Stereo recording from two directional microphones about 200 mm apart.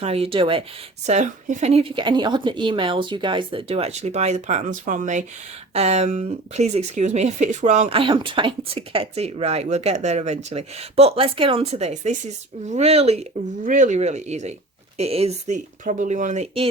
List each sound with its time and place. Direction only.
0.0 s speech: 30° right (ahead or behind)